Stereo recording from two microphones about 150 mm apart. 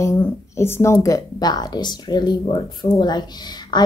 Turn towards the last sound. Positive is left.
turn(degrees=30)  # may be behind; listen again after turning